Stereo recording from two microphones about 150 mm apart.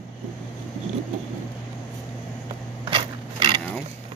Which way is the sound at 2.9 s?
35° right (ahead or behind).